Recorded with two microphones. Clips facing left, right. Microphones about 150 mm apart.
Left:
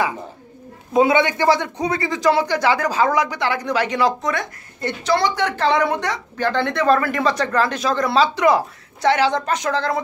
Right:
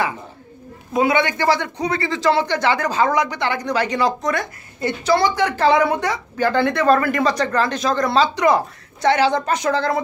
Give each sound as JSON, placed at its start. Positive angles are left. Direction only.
{"t": 0.9, "sound": "a man's voice", "side_deg": 20}